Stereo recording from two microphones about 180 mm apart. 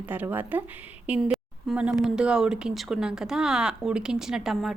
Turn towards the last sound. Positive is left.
turn(degrees=0)  # may be behind; listen again after turning